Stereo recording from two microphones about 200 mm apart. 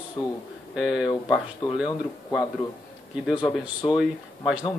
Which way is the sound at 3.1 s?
5° right (ahead or behind).